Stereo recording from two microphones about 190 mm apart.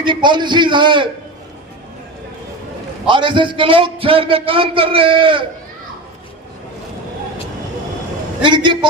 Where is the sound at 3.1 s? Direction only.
25° right (ahead or behind).